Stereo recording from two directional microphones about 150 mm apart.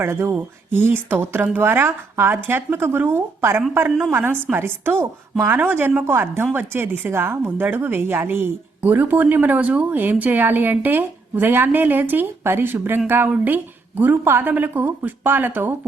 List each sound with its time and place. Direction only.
0.0 s a woman's voice: 15° right (ahead or behind)